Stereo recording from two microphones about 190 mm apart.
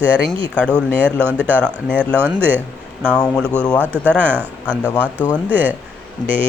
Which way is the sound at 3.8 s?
10° right (ahead or behind).